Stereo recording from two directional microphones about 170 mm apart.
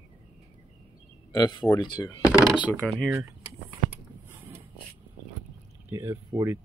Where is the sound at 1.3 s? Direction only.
25° left (ahead or behind).